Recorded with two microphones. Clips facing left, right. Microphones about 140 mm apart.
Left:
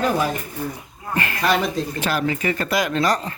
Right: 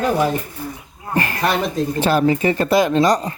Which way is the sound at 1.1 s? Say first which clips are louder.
Right 1 dB; 35° right (ahead or behind).